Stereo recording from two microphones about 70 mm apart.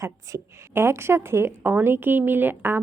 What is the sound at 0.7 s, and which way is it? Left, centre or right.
A woman's voice, right.